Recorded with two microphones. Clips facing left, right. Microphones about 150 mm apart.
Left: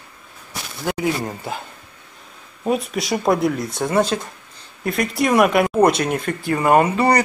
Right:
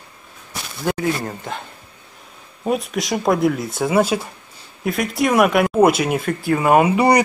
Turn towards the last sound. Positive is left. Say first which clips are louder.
# right 1 dB
turn(degrees=-15)  # may be behind; listen again after turning